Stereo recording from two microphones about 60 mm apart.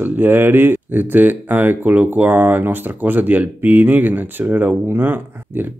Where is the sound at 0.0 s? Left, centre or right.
Right.